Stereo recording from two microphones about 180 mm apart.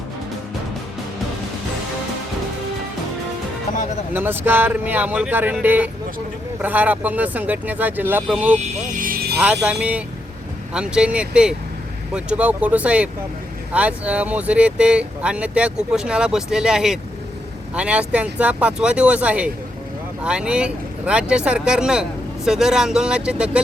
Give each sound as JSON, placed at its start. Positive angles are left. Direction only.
{"t": 4.1, "sound": "speech", "side_deg": -10}
{"t": 9.0, "sound": "vehicle", "side_deg": -55}
{"t": 9.4, "sound": "speech", "side_deg": -5}